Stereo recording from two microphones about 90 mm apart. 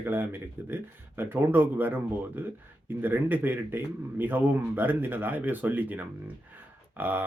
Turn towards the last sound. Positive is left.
turn(degrees=-20)  # may be behind; listen again after turning